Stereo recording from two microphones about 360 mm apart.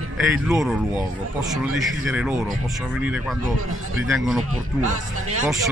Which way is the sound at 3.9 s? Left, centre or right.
Centre.